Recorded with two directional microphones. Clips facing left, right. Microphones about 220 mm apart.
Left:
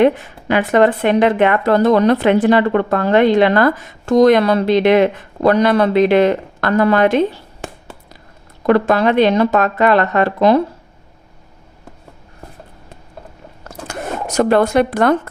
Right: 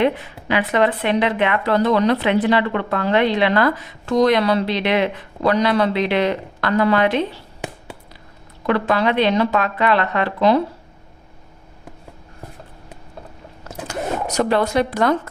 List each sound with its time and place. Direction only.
0.0 s speech: 45° left (ahead or behind)
8.6 s speech: 45° left (ahead or behind)
13.8 s speech: 50° left (ahead or behind)